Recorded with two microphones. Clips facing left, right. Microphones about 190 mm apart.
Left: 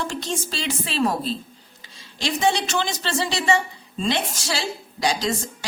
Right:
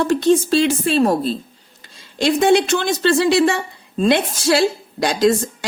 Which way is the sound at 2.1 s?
55° right (ahead or behind).